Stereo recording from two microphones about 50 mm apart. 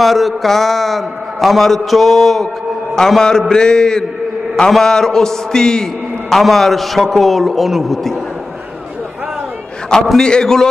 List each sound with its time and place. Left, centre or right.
0.0 s a man's voice: centre
9.9 s a man's voice: centre